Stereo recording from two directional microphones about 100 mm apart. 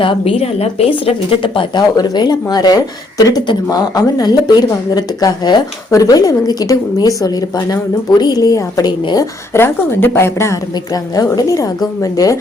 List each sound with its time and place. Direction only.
0.0 s a woman's voice: 65° left (ahead or behind)
2.0 s speech: 45° left (ahead or behind)
8.2 s speech: 40° left (ahead or behind)
9.5 s speech: 25° left (ahead or behind)
11.1 s speech: 40° left (ahead or behind)